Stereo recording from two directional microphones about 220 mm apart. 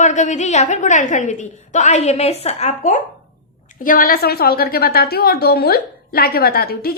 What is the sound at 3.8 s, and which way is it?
A woman's voice, 40° left (ahead or behind).